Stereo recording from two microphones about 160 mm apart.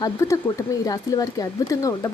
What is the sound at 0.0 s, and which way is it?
Speech, 20° left (ahead or behind).